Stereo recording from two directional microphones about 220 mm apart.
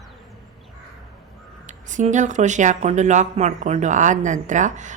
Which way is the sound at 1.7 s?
35° right (ahead or behind).